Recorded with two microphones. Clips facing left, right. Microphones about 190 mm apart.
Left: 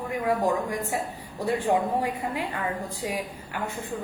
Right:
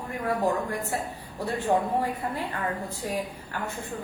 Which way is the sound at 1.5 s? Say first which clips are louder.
Left 1 dB; 15° left (ahead or behind).